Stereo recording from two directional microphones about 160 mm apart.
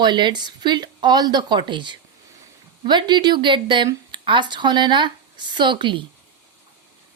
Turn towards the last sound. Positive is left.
turn(degrees=-30)  # may be behind; listen again after turning